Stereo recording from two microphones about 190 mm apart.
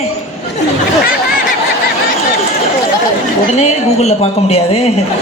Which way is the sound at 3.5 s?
35° left (ahead or behind).